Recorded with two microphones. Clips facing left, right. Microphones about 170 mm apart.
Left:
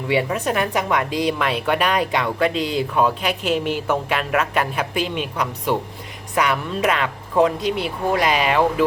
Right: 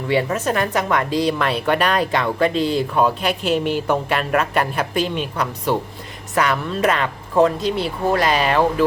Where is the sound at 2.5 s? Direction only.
40° right (ahead or behind).